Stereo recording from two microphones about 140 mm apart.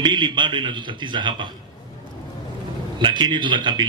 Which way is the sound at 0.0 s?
35° right (ahead or behind).